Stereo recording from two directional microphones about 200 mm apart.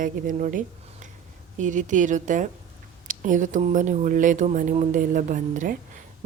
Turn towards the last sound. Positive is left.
turn(degrees=-40)  # may be behind; listen again after turning